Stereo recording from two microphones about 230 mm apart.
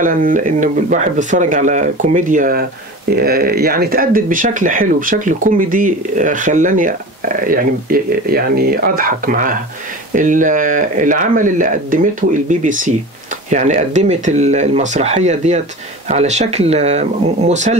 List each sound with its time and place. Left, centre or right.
0.0 s speech: right